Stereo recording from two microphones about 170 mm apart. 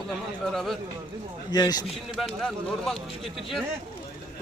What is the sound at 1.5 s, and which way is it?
Speech, 25° left (ahead or behind).